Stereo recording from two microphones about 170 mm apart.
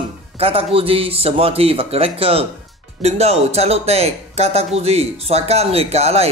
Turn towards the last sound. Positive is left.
turn(degrees=-40)  # may be behind; listen again after turning